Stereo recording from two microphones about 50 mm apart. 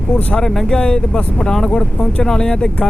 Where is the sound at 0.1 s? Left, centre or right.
Left.